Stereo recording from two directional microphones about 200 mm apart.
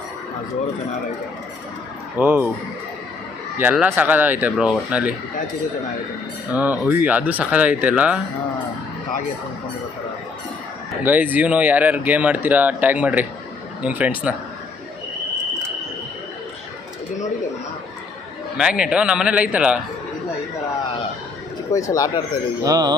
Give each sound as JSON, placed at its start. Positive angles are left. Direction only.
{"t": 2.1, "sound": "speech", "side_deg": -10}
{"t": 3.6, "sound": "speech", "side_deg": -10}
{"t": 6.5, "sound": "speech", "side_deg": -5}
{"t": 11.0, "sound": "speech", "side_deg": -10}
{"t": 18.5, "sound": "a man's voice", "side_deg": -5}
{"t": 21.9, "sound": "speech", "side_deg": 20}
{"t": 22.6, "sound": "music", "side_deg": -20}